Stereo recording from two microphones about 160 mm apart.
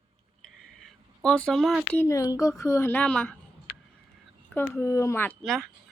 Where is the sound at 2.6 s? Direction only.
20° left (ahead or behind).